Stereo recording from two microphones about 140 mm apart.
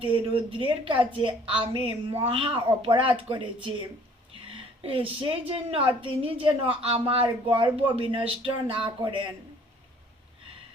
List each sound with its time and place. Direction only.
0.0 s a woman's voice: 40° right (ahead or behind)